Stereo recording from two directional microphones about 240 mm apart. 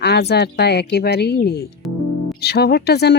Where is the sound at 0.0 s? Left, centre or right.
Left.